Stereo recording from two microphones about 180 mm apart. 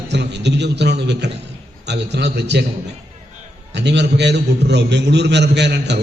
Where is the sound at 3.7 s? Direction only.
70° right (ahead or behind).